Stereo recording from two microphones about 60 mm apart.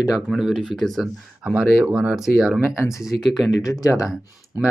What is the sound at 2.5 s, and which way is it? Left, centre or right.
Speech, centre.